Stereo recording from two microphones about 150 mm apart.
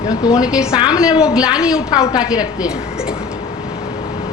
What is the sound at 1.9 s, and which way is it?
Speech, 25° left (ahead or behind).